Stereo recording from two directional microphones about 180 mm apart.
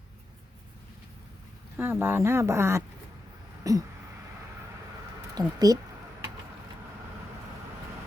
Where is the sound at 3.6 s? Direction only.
20° right (ahead or behind).